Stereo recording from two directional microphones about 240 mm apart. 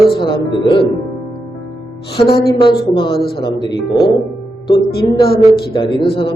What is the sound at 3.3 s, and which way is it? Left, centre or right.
Music, centre.